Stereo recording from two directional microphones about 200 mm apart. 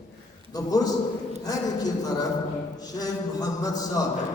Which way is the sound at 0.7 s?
20° left (ahead or behind).